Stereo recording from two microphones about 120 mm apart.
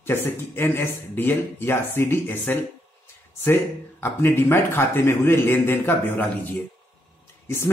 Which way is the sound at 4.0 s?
20° left (ahead or behind).